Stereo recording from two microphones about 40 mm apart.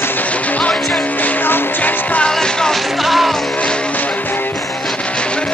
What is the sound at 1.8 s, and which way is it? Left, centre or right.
Music, left.